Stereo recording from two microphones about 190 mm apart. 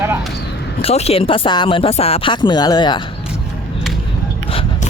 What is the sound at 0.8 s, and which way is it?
Speech, 30° left (ahead or behind).